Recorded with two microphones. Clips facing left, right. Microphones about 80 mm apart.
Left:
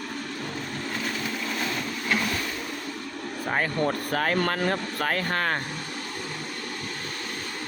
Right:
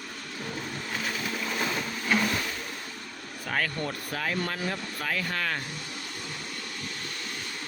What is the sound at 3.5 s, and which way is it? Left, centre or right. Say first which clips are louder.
Speech: left 4 dB; left.